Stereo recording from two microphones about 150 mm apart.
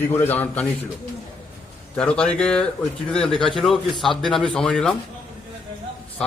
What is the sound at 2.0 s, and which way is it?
A man's voice, 5° left (ahead or behind).